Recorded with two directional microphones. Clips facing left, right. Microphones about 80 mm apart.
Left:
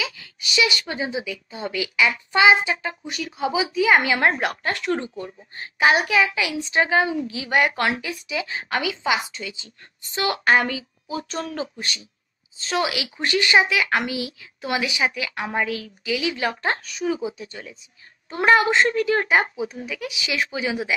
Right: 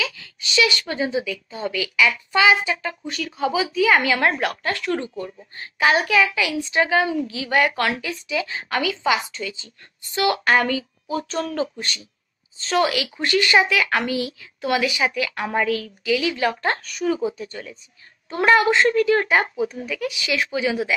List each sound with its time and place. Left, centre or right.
0.0 s a woman's voice: centre
3.1 s a woman's voice: centre
18.3 s a woman's voice: left